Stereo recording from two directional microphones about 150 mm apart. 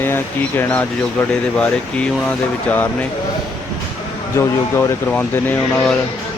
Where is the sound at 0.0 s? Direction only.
15° left (ahead or behind).